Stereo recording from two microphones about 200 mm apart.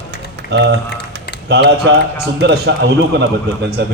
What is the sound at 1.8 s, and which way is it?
Speech, 60° right (ahead or behind).